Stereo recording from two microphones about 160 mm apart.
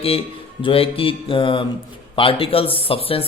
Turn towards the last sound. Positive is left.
turn(degrees=35)  # may be behind; listen again after turning